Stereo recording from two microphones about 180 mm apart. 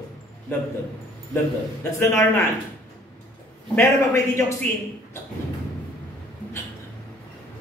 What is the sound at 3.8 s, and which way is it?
A man's voice, 15° left (ahead or behind).